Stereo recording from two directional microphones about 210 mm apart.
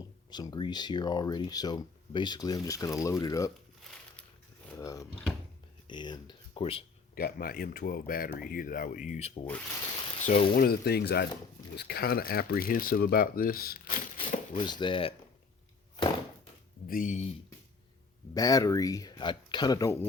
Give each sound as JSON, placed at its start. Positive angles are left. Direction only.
{"t": 0.3, "sound": "speech", "side_deg": 20}
{"t": 4.7, "sound": "a sound", "side_deg": 15}
{"t": 5.9, "sound": "speech", "side_deg": 20}
{"t": 7.2, "sound": "speech", "side_deg": 45}
{"t": 14.6, "sound": "speech", "side_deg": 20}
{"t": 16.9, "sound": "speech", "side_deg": 35}
{"t": 18.3, "sound": "speech", "side_deg": 15}